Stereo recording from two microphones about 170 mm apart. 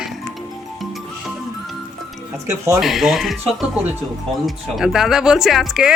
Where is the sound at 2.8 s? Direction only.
Centre (ahead or behind).